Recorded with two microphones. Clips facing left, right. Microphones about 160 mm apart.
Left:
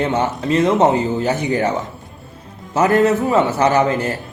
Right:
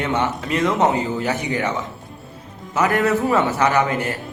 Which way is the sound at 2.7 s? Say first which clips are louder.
Left 4 dB; 30° left (ahead or behind).